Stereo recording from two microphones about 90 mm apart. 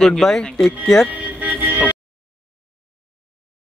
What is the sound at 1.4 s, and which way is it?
Music, 20° right (ahead or behind).